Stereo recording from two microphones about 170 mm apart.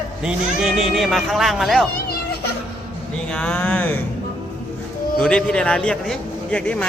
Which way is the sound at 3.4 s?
5° left (ahead or behind).